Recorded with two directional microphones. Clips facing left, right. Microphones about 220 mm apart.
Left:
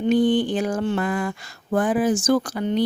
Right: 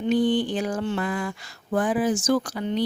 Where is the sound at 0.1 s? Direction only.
50° left (ahead or behind).